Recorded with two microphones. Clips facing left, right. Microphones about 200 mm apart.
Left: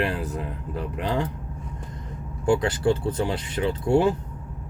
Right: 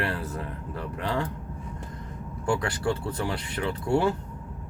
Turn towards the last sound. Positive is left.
turn(degrees=20)  # may be behind; listen again after turning